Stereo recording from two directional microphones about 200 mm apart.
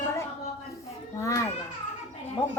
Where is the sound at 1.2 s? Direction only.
15° left (ahead or behind).